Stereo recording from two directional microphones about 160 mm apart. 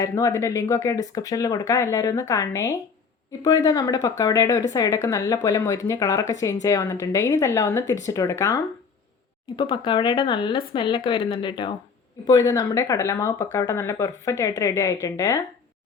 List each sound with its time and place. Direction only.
0.0 s speech: 20° left (ahead or behind)